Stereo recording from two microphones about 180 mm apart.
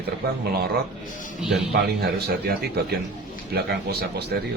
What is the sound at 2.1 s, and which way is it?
Speech, 60° right (ahead or behind).